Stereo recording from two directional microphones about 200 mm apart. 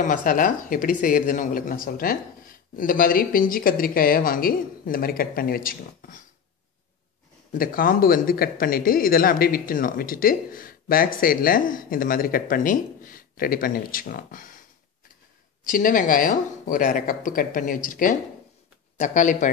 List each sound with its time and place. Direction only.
0.0 s speech: 40° left (ahead or behind)
7.5 s speech: 45° left (ahead or behind)
15.6 s speech: 45° left (ahead or behind)